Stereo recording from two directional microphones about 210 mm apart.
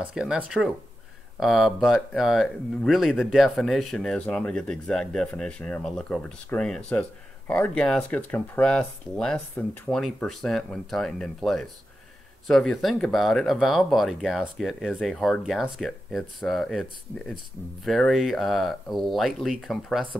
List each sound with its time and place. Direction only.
0.0 s speech: 5° right (ahead or behind)
17.8 s speech: centre (ahead or behind)